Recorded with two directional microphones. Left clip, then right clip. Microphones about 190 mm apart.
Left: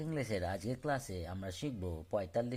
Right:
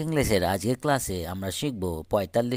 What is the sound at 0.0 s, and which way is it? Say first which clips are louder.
Speech: right 14 dB; 35° right (ahead or behind).